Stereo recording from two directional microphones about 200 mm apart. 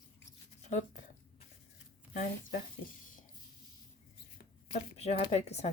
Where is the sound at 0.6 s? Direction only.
35° left (ahead or behind).